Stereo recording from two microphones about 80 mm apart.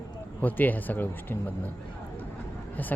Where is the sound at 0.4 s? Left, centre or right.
Left.